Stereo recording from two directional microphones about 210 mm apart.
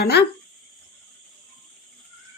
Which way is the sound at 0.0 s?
50° left (ahead or behind).